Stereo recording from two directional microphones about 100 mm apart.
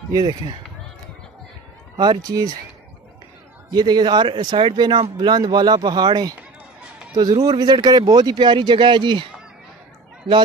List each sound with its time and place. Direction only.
0.1 s speech: 50° right (ahead or behind)
2.0 s speech: 40° right (ahead or behind)
3.7 s speech: 45° right (ahead or behind)
7.4 s speech: 45° right (ahead or behind)